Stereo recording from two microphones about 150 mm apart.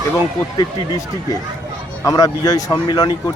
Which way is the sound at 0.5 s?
25° left (ahead or behind).